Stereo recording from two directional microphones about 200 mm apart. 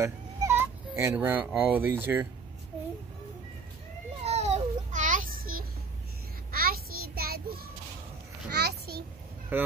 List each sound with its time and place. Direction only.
0.0 s speech: 15° right (ahead or behind)
4.2 s children playing: 35° right (ahead or behind)
6.5 s child singing: 45° right (ahead or behind)
8.5 s a sound: 55° right (ahead or behind)
9.5 s speech: 10° right (ahead or behind)